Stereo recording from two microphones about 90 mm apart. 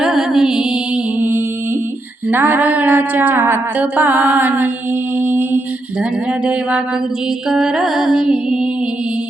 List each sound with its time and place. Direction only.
0.0 s music: 5° right (ahead or behind)
2.3 s music: 20° right (ahead or behind); by 8.5 s 5° right (ahead or behind)